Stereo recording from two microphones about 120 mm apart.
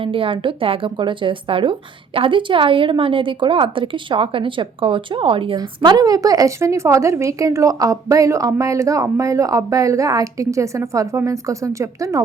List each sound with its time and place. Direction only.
0.0 s a woman's voice: 45° right (ahead or behind)
5.5 s a woman's voice: 35° right (ahead or behind)